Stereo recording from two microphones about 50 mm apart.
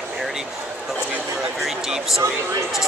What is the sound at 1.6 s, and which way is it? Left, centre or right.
Speech, centre.